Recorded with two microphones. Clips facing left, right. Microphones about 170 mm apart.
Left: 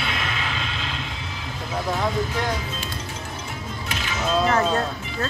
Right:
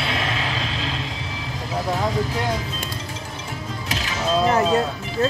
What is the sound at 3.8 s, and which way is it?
Music, 35° right (ahead or behind).